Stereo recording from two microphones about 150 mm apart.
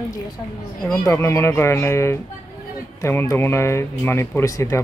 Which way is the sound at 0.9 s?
15° left (ahead or behind).